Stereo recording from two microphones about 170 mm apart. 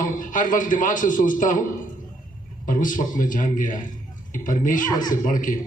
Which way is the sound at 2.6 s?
50° left (ahead or behind).